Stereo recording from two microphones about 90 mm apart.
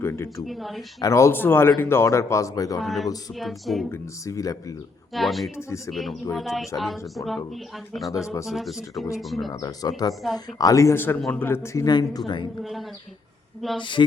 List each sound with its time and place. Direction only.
0.0 s speech: 30° left (ahead or behind)
0.4 s speech: centre (ahead or behind)
1.0 s speech: 35° left (ahead or behind)
2.8 s speech: centre (ahead or behind)
3.8 s speech: 30° left (ahead or behind)
5.1 s speech: centre (ahead or behind)
5.5 s speech: 35° left (ahead or behind)
5.9 s speech: centre (ahead or behind)
9.5 s speech: 45° left (ahead or behind)
10.9 s speech: 25° left (ahead or behind)
11.9 s speech: 50° left (ahead or behind)
13.6 s speech: centre (ahead or behind)